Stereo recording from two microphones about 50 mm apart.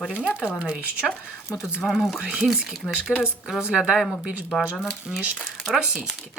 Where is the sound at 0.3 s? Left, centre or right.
Centre.